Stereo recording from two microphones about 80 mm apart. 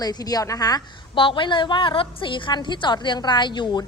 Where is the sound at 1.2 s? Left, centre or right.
Left.